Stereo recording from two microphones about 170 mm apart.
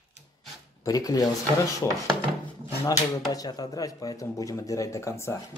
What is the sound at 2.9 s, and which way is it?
Speech, 20° left (ahead or behind).